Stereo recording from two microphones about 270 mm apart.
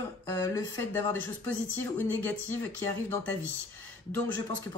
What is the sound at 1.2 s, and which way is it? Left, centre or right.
Speech, right.